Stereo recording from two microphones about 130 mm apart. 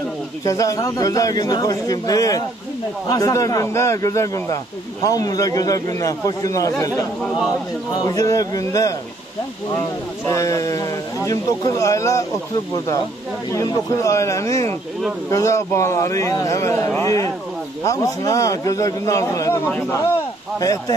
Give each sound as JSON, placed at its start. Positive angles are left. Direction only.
{"t": 0.5, "sound": "speech", "side_deg": 25}
{"t": 7.9, "sound": "speech", "side_deg": 30}